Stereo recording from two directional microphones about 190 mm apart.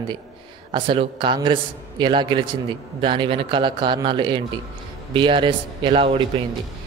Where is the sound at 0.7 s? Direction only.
25° right (ahead or behind).